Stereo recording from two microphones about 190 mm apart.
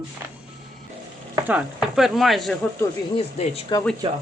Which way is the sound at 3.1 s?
30° left (ahead or behind).